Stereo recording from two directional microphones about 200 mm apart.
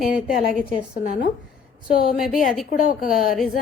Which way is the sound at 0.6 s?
45° left (ahead or behind).